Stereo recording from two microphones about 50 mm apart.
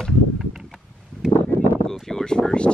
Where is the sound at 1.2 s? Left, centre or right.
Centre.